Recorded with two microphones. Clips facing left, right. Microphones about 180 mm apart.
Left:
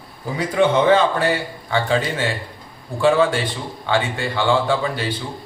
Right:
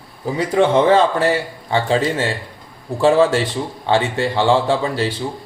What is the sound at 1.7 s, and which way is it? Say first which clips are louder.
Speech: right 3 dB; 30° right (ahead or behind).